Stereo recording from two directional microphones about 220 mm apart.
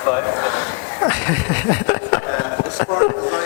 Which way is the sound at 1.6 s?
20° left (ahead or behind).